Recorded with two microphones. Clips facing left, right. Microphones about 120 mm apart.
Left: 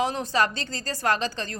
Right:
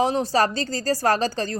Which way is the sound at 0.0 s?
30° right (ahead or behind).